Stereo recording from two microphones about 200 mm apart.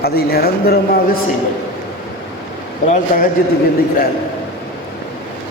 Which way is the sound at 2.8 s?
45° left (ahead or behind).